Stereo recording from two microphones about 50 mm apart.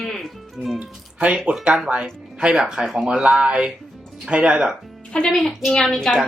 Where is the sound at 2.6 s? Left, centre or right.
Centre.